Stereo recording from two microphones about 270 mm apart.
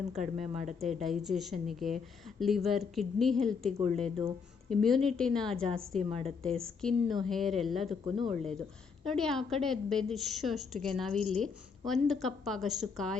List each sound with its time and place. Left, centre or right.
0.1 s a woman's voice: centre